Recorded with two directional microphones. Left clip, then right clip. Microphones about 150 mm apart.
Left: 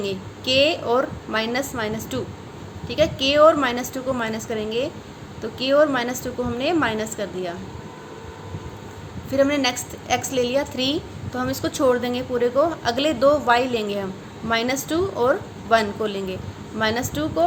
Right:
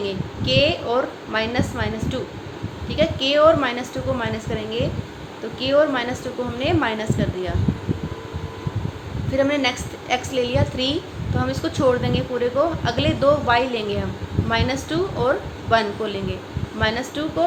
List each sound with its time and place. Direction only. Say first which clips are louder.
0.0 s a woman's voice: right 1 dB; 35° left (ahead or behind)
9.3 s a woman's voice: even; 35° left (ahead or behind)